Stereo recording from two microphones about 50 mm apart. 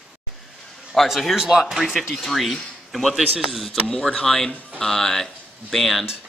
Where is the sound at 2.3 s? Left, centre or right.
Centre.